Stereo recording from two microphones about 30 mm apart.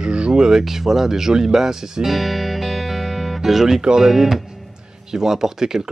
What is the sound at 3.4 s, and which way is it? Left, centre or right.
Speech, centre.